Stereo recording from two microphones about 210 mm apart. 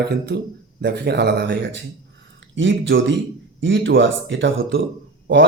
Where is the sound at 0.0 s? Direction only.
50° right (ahead or behind).